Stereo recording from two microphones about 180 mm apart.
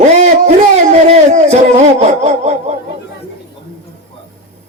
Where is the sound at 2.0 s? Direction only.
40° right (ahead or behind).